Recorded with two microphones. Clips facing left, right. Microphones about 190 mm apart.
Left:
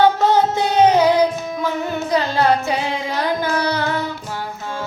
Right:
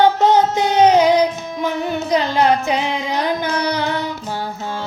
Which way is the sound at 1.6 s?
20° right (ahead or behind).